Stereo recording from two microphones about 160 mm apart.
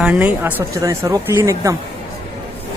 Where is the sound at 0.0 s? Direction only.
10° right (ahead or behind).